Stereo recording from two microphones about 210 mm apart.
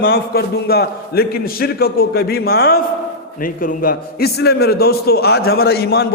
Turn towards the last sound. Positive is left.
turn(degrees=50)  # may be behind; listen again after turning